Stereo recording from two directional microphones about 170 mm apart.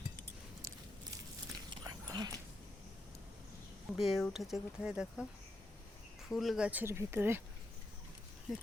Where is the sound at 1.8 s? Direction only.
20° right (ahead or behind).